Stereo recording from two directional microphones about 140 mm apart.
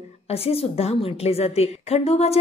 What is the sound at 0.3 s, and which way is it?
A woman's voice, 45° left (ahead or behind).